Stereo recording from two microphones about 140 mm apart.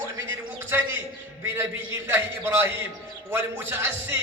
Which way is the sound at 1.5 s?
15° right (ahead or behind).